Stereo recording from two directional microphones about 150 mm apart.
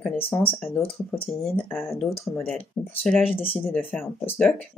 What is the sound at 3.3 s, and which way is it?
Speech, 40° left (ahead or behind).